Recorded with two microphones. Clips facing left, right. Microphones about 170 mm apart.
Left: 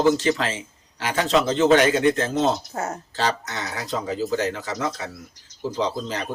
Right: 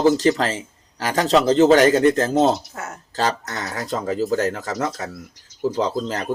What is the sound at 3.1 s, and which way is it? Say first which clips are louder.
Speech: right 4 dB; 45° right (ahead or behind).